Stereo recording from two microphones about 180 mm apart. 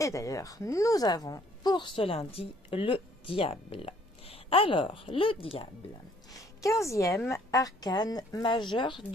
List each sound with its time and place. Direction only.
0.0 s a woman's voice: 15° left (ahead or behind)
6.6 s a woman's voice: 15° left (ahead or behind)